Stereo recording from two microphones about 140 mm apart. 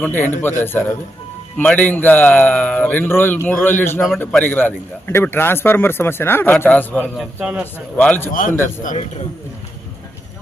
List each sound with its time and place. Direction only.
0.0 s a man's voice: 15° left (ahead or behind)
7.3 s a man's voice: 10° right (ahead or behind)
7.9 s a man's voice: 10° left (ahead or behind)
8.3 s a man's voice: 75° left (ahead or behind)